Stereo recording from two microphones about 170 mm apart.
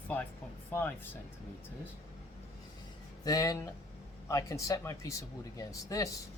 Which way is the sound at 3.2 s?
20° left (ahead or behind).